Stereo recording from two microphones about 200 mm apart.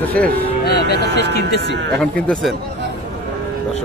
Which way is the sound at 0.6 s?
55° left (ahead or behind).